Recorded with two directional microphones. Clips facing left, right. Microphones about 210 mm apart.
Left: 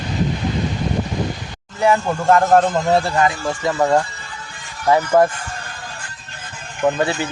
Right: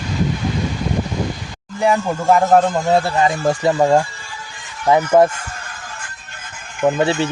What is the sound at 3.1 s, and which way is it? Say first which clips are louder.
Speech: right 2 dB; 25° right (ahead or behind).